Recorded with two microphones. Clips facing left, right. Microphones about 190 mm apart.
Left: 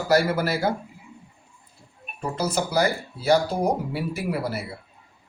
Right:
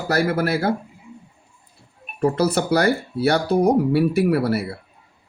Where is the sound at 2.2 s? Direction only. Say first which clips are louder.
Right 7 dB; 65° right (ahead or behind).